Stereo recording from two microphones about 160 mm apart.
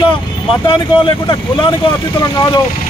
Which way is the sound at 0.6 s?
30° left (ahead or behind).